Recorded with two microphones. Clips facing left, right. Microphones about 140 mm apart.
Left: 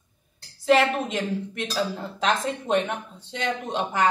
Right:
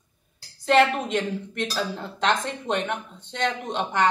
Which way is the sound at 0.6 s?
5° left (ahead or behind).